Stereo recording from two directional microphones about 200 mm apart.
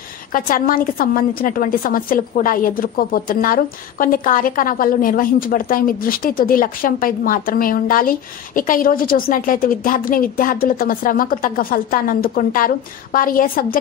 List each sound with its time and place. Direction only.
0.3 s a woman's voice: 45° left (ahead or behind)